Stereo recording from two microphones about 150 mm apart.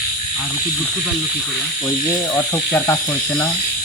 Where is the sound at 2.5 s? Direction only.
15° left (ahead or behind).